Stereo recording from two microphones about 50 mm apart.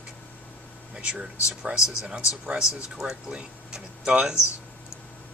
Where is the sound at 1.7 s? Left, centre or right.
Right.